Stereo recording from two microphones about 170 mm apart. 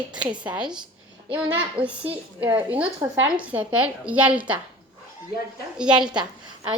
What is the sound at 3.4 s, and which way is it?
A woman's voice, 10° right (ahead or behind).